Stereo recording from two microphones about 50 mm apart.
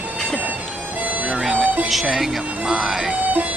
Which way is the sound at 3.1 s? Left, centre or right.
Right.